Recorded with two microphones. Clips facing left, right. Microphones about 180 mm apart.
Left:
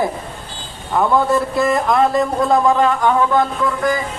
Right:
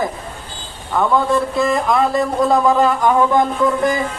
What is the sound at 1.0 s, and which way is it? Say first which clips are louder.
Speech: even; 5° left (ahead or behind).